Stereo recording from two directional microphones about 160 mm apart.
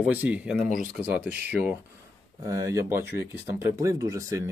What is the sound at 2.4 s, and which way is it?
Speech, 20° right (ahead or behind).